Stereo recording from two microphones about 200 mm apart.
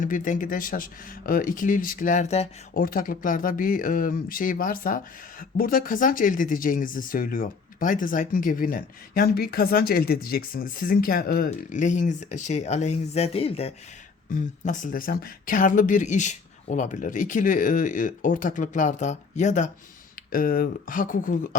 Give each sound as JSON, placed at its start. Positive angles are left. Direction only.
{"t": 0.0, "sound": "speech", "side_deg": 40}
{"t": 2.7, "sound": "speech", "side_deg": 45}